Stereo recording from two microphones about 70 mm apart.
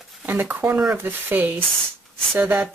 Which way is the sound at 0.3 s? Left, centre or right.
Right.